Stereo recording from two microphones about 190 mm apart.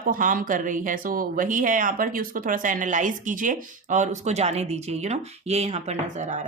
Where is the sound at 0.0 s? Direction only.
45° right (ahead or behind).